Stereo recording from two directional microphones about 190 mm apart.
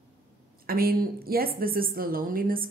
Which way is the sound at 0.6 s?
50° right (ahead or behind).